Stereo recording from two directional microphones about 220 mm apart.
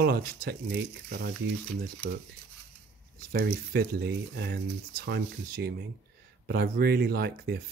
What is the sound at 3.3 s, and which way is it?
Speech, 45° right (ahead or behind).